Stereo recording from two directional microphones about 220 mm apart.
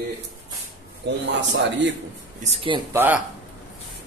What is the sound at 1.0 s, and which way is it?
Speech, 55° right (ahead or behind).